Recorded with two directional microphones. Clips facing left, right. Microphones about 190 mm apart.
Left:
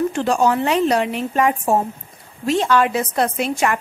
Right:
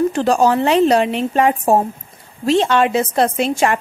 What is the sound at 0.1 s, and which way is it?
A woman's voice, 35° right (ahead or behind).